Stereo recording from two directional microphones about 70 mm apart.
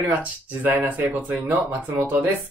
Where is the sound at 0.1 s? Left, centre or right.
Right.